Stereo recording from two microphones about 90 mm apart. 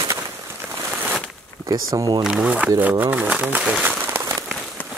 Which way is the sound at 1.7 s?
45° right (ahead or behind).